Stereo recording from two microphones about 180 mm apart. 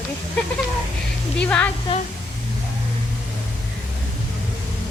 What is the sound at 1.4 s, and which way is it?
Speech, 5° left (ahead or behind).